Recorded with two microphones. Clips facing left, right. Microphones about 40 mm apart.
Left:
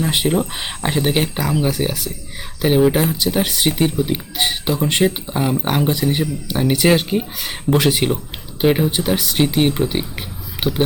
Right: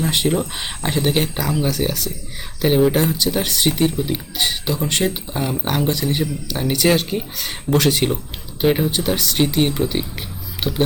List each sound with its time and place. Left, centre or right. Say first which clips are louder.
0.0 s speech: left 1 dB; centre